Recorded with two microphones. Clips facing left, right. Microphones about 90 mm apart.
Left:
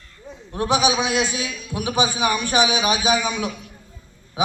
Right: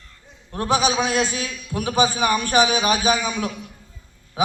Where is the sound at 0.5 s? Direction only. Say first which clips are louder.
Left 1 dB; 15° left (ahead or behind).